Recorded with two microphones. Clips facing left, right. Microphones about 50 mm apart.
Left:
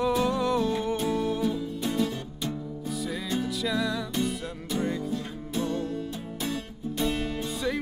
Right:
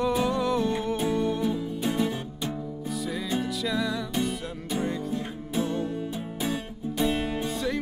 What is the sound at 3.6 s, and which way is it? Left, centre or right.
Music, centre.